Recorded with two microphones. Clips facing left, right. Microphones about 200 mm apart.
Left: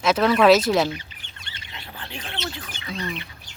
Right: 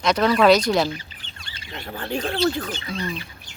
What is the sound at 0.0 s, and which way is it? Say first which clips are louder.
Speech: even; 5° left (ahead or behind).